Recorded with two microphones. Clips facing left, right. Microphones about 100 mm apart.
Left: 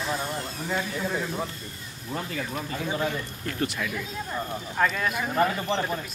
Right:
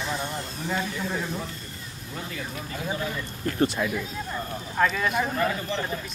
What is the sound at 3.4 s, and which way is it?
Speech, 30° right (ahead or behind).